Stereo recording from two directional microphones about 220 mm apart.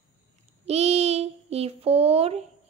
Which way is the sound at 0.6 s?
30° right (ahead or behind).